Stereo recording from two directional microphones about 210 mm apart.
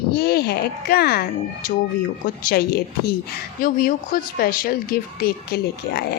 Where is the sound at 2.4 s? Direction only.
50° left (ahead or behind).